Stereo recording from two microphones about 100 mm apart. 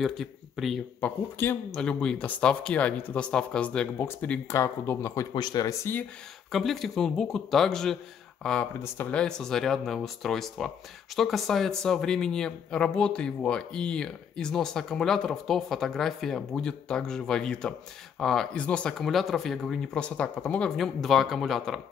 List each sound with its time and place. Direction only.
0.0 s speech: centre (ahead or behind)
1.0 s speech: 20° left (ahead or behind)
1.7 s speech: 10° left (ahead or behind)
4.5 s speech: 25° left (ahead or behind)
5.3 s speech: 45° left (ahead or behind)
5.7 s speech: 25° left (ahead or behind)
6.5 s speech: centre (ahead or behind)